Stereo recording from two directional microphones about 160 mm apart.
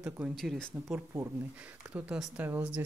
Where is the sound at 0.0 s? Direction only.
5° right (ahead or behind).